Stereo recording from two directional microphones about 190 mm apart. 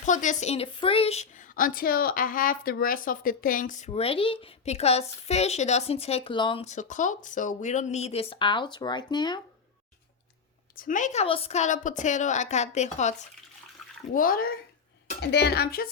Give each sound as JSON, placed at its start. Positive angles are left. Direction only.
{"t": 0.0, "sound": "speech", "side_deg": 40}
{"t": 10.8, "sound": "a child's voice", "side_deg": 45}
{"t": 15.2, "sound": "speech", "side_deg": 60}